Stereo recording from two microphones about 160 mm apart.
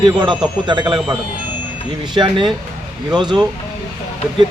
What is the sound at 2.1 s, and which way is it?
Speech, 30° right (ahead or behind).